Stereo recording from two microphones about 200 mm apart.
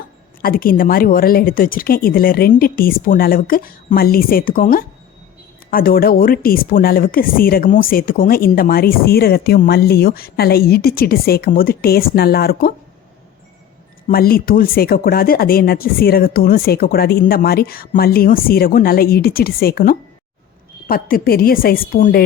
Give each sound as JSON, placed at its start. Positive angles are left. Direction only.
{"t": 0.4, "sound": "speech", "side_deg": 45}
{"t": 14.1, "sound": "speech", "side_deg": 50}